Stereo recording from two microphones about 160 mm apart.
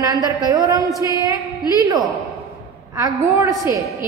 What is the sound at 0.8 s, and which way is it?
Speech, 20° left (ahead or behind).